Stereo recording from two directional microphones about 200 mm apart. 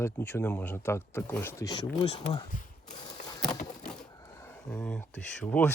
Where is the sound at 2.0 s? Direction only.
30° left (ahead or behind).